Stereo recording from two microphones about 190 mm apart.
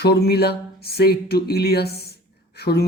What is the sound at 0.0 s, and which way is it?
Speech, 55° left (ahead or behind).